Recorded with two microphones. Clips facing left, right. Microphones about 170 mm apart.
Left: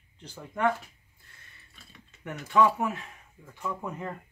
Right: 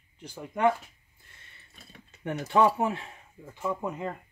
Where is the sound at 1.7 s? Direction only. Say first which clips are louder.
Right 4 dB; 45° right (ahead or behind).